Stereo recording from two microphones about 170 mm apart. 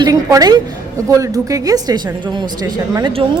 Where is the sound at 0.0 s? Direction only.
20° right (ahead or behind).